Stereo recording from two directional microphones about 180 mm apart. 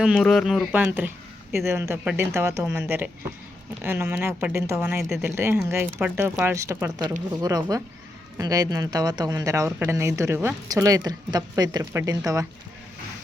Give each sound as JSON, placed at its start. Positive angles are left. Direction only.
{"t": 0.0, "sound": "speech", "side_deg": 0}